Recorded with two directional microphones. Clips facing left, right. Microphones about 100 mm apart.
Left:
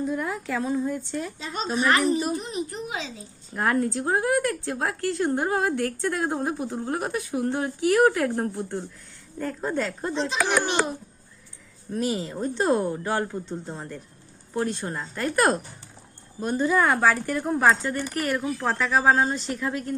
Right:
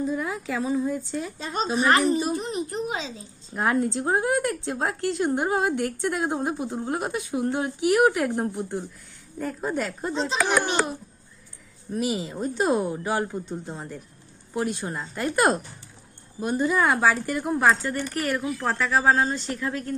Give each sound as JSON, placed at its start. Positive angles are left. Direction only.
{"t": 0.0, "sound": "a woman's voice", "side_deg": 0}
{"t": 1.7, "sound": "a child's voice", "side_deg": -40}
{"t": 2.1, "sound": "a child's voice", "side_deg": -20}
{"t": 2.4, "sound": "a child's voice", "side_deg": -40}
{"t": 3.5, "sound": "speech", "side_deg": -15}
{"t": 11.9, "sound": "a woman's voice", "side_deg": -10}